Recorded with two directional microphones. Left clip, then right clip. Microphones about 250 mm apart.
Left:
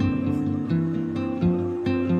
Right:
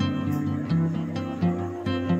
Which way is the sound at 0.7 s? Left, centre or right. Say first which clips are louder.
Left 3 dB; right.